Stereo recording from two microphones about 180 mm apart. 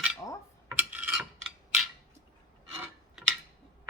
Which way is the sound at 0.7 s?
10° right (ahead or behind).